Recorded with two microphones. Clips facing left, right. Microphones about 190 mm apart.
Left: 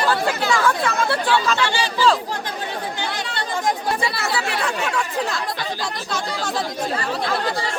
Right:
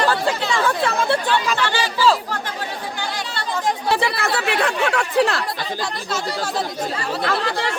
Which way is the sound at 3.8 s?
70° right (ahead or behind).